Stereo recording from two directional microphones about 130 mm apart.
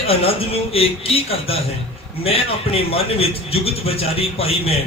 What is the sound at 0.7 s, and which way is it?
Speech, 50° left (ahead or behind).